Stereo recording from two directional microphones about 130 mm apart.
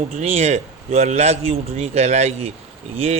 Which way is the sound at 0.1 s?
55° right (ahead or behind).